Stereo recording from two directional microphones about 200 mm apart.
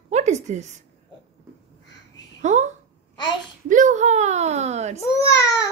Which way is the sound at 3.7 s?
40° right (ahead or behind).